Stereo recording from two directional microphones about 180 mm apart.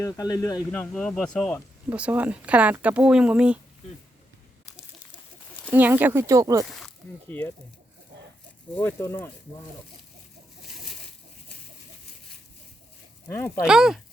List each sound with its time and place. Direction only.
0.0 s speech: 20° left (ahead or behind)
0.7 s speech: 5° left (ahead or behind)
1.9 s speech: 10° right (ahead or behind)
5.7 s speech: 10° right (ahead or behind)
6.7 s speech: centre (ahead or behind)
8.7 s speech: 10° left (ahead or behind)
13.2 s speech: 15° left (ahead or behind)
13.7 s speech: centre (ahead or behind)